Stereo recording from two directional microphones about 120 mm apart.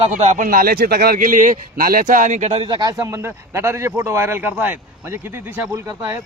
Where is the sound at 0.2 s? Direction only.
75° right (ahead or behind).